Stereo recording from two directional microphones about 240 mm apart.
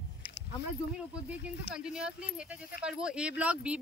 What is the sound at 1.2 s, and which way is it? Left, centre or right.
Speech, centre.